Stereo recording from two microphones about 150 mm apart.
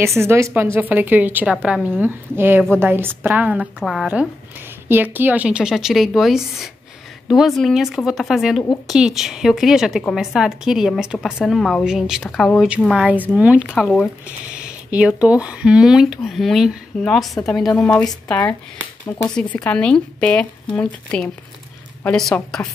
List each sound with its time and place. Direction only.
0.0 s a woman's voice: 20° right (ahead or behind)
3.8 s speech: centre (ahead or behind)
4.8 s a woman's voice: 15° right (ahead or behind)
13.7 s speech: 10° left (ahead or behind)
14.5 s speech: 10° right (ahead or behind)
18.3 s speech: 15° left (ahead or behind)